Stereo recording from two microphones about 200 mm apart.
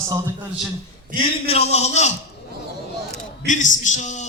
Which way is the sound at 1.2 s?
30° left (ahead or behind).